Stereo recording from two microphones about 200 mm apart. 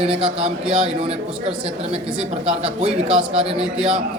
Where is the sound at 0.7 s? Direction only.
30° right (ahead or behind).